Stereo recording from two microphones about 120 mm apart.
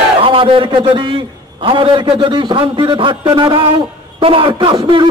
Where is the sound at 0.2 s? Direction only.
45° right (ahead or behind).